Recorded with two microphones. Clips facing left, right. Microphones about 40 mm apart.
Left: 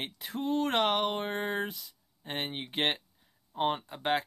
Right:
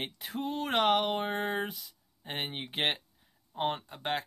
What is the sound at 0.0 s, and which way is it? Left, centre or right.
Speech, centre.